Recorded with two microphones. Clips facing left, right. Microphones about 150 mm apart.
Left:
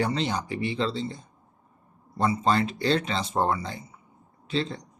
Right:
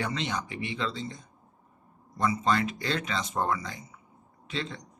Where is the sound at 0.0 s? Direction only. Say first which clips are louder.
Left 5 dB; 35° left (ahead or behind).